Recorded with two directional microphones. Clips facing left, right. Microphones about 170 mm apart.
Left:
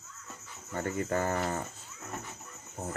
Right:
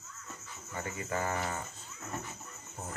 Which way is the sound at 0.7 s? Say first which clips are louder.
Left 6 dB; 45° left (ahead or behind).